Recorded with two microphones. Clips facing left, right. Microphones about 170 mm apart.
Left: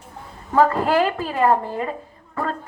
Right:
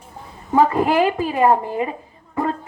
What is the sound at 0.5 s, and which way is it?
A woman's voice, 15° right (ahead or behind).